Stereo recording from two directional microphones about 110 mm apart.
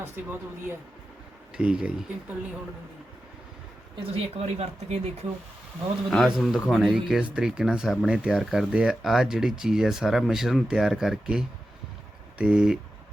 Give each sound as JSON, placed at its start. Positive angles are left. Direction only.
{"t": 0.0, "sound": "speech", "side_deg": -25}
{"t": 1.5, "sound": "speech", "side_deg": -10}
{"t": 4.1, "sound": "speech", "side_deg": -70}
{"t": 6.1, "sound": "speech", "side_deg": 0}